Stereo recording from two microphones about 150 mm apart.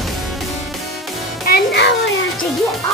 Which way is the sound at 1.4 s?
90° left.